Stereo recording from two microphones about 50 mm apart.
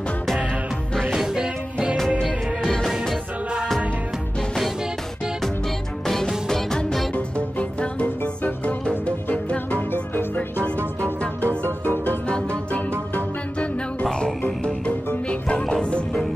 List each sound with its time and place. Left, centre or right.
1.1 s music: centre
1.4 s music: centre
2.6 s music: centre
6.0 s music: centre
7.2 s music: left
8.2 s music: left
10.8 s music: right
11.9 s music: left
12.3 s music: left
15.2 s music: centre